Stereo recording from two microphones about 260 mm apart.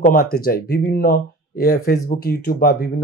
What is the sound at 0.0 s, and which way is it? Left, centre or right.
Speech, left.